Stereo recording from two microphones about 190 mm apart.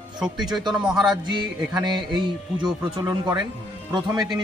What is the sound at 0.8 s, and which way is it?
Music, 5° right (ahead or behind).